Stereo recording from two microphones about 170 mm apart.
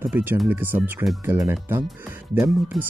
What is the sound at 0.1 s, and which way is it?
Speech, 10° right (ahead or behind).